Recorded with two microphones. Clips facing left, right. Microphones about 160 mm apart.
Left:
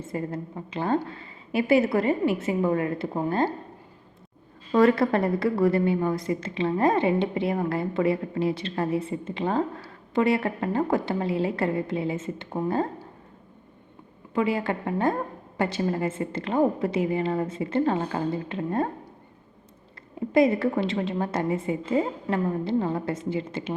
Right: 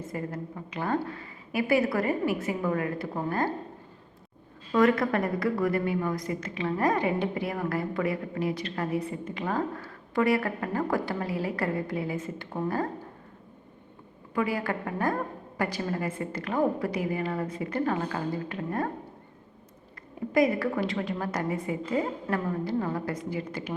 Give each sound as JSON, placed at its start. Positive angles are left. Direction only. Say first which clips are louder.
{"t": 0.0, "sound": "a woman's voice", "louder": "left 3 dB", "side_deg": 25}
{"t": 4.7, "sound": "a woman's voice", "louder": "left 3 dB", "side_deg": 30}
{"t": 14.3, "sound": "a woman's voice", "louder": "left 3 dB", "side_deg": 25}
{"t": 20.3, "sound": "a woman's voice", "louder": "left 4 dB", "side_deg": 25}